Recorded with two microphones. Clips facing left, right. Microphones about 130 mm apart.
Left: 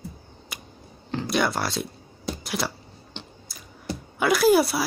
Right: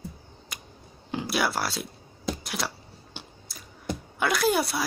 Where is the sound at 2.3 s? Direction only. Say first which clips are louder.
Left 4 dB; centre (ahead or behind).